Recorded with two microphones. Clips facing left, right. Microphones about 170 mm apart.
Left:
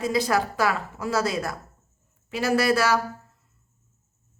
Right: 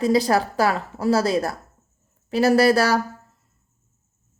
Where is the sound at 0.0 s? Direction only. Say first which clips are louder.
Right 5 dB; 35° right (ahead or behind).